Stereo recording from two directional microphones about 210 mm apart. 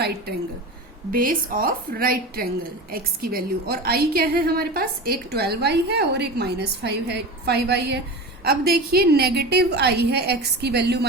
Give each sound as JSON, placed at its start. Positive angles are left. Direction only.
{"t": 1.1, "sound": "a woman's voice", "side_deg": -40}